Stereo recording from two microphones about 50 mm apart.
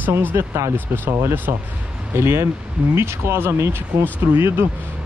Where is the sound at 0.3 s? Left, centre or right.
Right.